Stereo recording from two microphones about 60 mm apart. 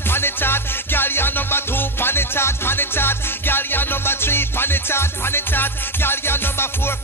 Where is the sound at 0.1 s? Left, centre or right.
Left.